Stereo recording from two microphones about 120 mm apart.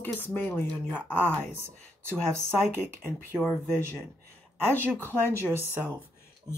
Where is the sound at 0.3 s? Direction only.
15° left (ahead or behind).